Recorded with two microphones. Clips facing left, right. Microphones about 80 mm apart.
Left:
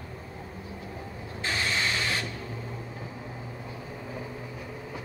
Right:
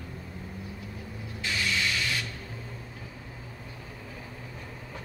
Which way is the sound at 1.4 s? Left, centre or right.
Left.